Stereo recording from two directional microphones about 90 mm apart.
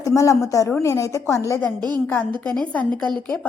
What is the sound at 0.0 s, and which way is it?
A woman's voice, 35° left (ahead or behind).